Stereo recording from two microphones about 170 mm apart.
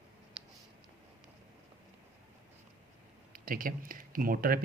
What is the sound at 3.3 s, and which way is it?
Speech, 55° right (ahead or behind).